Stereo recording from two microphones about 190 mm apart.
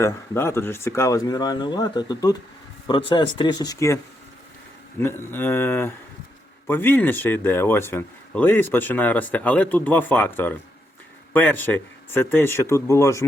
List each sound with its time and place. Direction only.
0.0 s speech: 15° left (ahead or behind)